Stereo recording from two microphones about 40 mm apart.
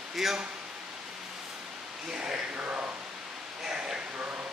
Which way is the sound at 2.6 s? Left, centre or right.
Right.